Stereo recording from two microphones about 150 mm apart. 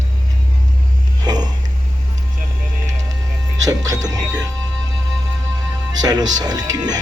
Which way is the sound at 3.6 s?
25° right (ahead or behind).